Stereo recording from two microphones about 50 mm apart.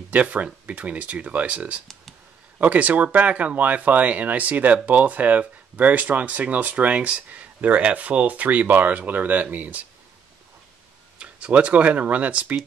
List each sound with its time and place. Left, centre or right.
0.1 s speech: right
11.1 s speech: right